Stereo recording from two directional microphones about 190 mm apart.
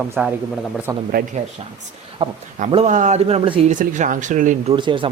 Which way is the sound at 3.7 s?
40° right (ahead or behind).